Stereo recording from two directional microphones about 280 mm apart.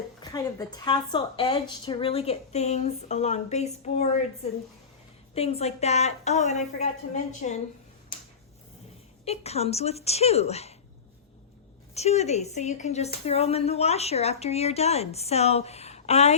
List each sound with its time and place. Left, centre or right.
0.2 s speech: centre
5.3 s speech: left
9.2 s speech: left
11.9 s speech: left